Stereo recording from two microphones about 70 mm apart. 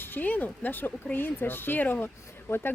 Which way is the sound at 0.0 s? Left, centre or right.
Left.